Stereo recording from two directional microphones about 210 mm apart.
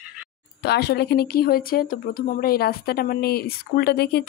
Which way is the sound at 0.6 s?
50° left (ahead or behind).